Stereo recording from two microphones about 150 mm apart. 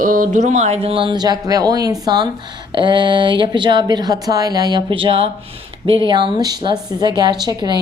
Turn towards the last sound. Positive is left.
turn(degrees=-30)  # may be behind; listen again after turning